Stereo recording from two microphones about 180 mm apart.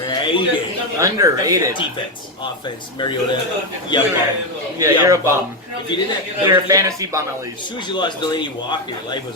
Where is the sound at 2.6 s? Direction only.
25° left (ahead or behind).